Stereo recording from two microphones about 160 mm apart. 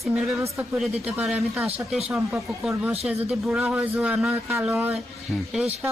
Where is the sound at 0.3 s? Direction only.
20° right (ahead or behind).